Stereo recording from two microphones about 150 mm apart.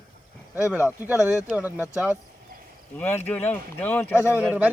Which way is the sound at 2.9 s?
15° left (ahead or behind).